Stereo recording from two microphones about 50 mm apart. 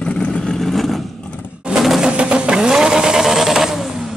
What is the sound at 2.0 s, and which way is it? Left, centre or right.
Vehicle, centre.